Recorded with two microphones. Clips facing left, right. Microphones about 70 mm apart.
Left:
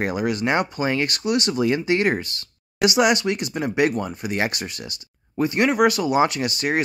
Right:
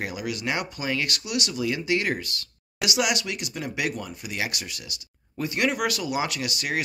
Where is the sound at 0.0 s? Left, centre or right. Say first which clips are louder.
Left 7 dB; left.